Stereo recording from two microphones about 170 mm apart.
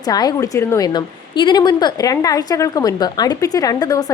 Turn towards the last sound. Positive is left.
turn(degrees=20)  # may be behind; listen again after turning